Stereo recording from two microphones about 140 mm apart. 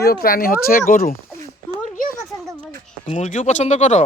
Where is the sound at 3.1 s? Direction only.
60° left (ahead or behind).